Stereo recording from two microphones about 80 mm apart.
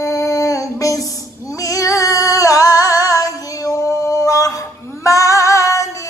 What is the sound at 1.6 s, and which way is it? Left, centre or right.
Female singing, left.